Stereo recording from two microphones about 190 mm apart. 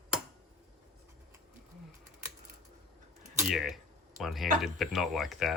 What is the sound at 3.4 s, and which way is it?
Speech, centre (ahead or behind).